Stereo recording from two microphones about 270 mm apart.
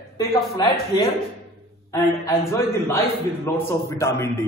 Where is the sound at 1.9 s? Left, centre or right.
Centre.